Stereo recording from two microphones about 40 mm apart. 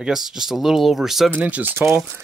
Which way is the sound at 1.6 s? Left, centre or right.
Right.